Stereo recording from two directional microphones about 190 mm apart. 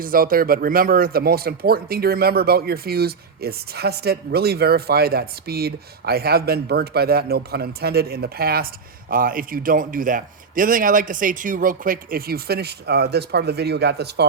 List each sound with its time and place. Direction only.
0.0 s speech: 50° right (ahead or behind)